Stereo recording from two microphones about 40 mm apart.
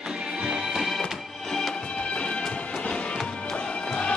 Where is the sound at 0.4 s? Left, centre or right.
Centre.